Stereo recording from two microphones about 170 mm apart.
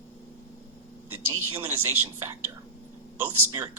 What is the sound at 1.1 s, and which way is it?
A man's voice, 15° right (ahead or behind).